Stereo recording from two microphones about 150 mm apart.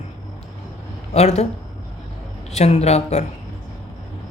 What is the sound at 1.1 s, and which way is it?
Speech, 45° left (ahead or behind).